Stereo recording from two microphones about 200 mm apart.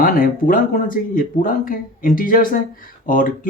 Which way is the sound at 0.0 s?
45° left (ahead or behind).